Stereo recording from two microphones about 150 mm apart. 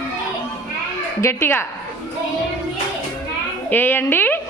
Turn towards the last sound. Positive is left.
turn(degrees=15)  # may be behind; listen again after turning